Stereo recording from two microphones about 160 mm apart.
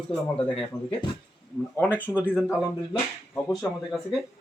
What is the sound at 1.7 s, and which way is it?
Speech, 10° right (ahead or behind).